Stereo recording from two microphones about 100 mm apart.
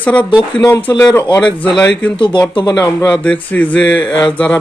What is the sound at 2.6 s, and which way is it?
Speech, 40° left (ahead or behind).